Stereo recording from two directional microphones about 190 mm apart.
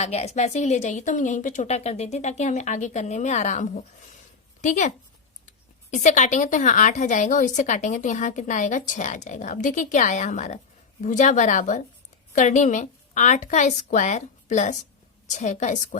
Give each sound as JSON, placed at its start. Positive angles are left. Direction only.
{"t": 0.0, "sound": "a woman's voice", "side_deg": 35}
{"t": 5.9, "sound": "a woman's voice", "side_deg": 40}